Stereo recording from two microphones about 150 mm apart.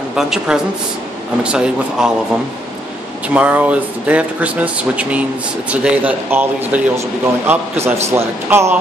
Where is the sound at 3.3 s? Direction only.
10° right (ahead or behind).